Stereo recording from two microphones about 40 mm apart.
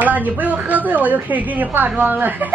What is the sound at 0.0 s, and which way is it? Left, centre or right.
A woman's voice, right.